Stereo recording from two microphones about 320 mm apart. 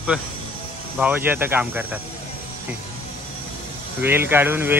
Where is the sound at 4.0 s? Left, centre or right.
Centre.